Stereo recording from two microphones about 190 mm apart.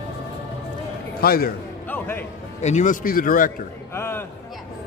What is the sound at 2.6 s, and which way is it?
Speech, 40° left (ahead or behind).